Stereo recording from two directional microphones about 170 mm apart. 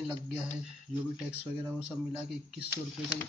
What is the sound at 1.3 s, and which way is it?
Speech, 5° right (ahead or behind).